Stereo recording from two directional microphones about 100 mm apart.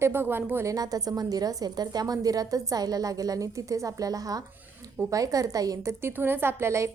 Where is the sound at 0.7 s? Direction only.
40° right (ahead or behind).